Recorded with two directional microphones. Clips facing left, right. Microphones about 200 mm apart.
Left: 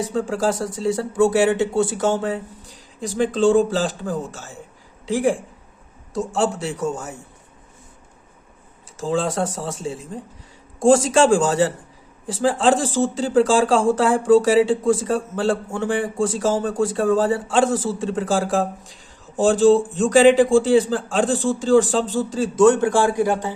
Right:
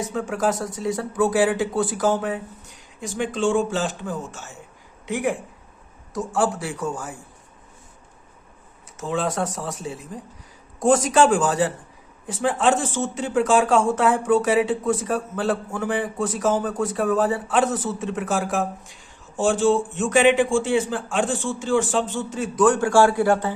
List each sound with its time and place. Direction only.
0.0 s speech: 30° left (ahead or behind)
9.0 s speech: 30° left (ahead or behind)